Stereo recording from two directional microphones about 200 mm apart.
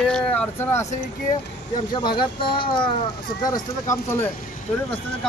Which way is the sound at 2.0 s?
25° left (ahead or behind).